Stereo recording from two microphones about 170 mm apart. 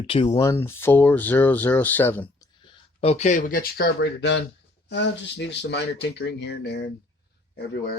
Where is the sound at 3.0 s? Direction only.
40° left (ahead or behind); by 6.8 s 75° left (ahead or behind).